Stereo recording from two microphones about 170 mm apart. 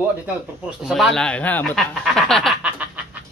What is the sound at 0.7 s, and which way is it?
Speech, 5° right (ahead or behind).